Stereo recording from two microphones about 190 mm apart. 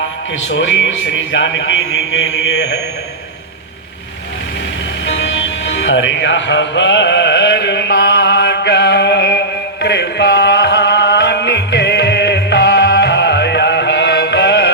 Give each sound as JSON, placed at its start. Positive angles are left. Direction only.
{"t": 0.4, "sound": "a man's voice", "side_deg": 80}
{"t": 5.0, "sound": "music", "side_deg": 75}